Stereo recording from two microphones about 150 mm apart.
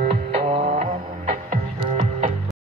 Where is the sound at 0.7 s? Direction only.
50° right (ahead or behind).